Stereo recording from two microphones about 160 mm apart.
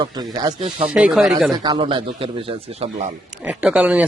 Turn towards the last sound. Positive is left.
turn(degrees=-5)  # may be behind; listen again after turning